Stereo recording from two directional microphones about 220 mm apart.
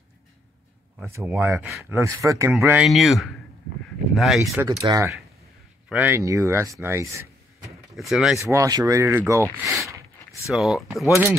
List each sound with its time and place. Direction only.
0.9 s speech: 10° right (ahead or behind)
4.6 s speech: 15° right (ahead or behind)
7.9 s speech: centre (ahead or behind)
8.5 s speech: 15° right (ahead or behind)
10.5 s speech: centre (ahead or behind)